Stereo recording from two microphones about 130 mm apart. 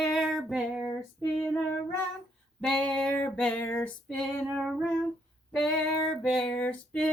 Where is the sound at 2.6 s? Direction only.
5° left (ahead or behind).